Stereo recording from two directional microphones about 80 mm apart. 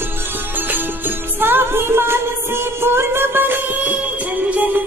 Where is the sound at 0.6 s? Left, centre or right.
Right.